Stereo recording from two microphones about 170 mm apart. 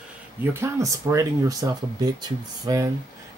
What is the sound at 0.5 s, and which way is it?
Speech, 15° right (ahead or behind).